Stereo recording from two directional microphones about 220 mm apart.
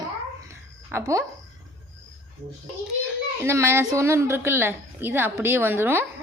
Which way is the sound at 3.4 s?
10° right (ahead or behind).